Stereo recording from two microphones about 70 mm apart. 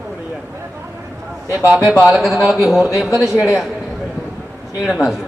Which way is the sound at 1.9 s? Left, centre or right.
Centre.